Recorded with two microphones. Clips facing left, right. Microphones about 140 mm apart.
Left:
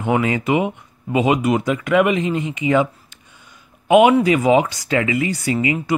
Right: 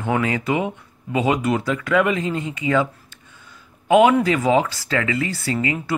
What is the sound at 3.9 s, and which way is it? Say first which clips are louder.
Speech: left 2 dB; 15° left (ahead or behind).